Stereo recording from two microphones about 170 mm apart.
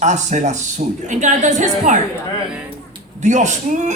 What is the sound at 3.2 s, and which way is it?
Speech, 45° right (ahead or behind).